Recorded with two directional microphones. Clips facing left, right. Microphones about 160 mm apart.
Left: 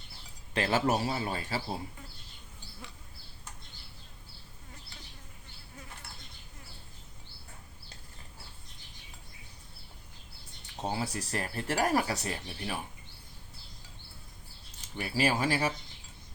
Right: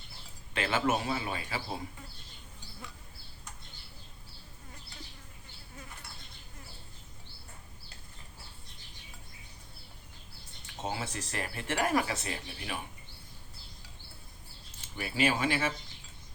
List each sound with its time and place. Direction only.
0.5 s speech: 40° left (ahead or behind)
10.8 s speech: 35° left (ahead or behind)
14.8 s speech: 35° left (ahead or behind)